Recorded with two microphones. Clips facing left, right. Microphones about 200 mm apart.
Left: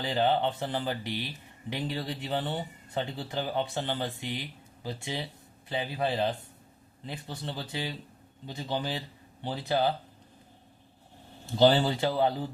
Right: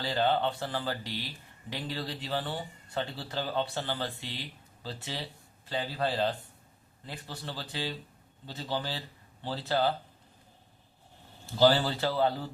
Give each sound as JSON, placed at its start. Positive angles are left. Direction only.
{"t": 0.0, "sound": "speech", "side_deg": 15}
{"t": 11.5, "sound": "speech", "side_deg": 20}